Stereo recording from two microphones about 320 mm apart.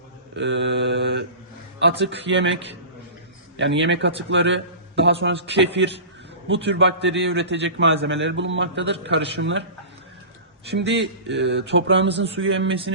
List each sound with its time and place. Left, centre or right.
0.3 s mantra: right
1.8 s a man's voice: right
10.8 s a man's voice: right